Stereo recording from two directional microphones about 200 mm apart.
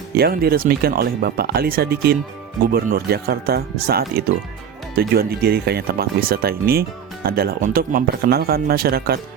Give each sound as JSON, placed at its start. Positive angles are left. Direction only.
{"t": 0.2, "sound": "speech", "side_deg": -50}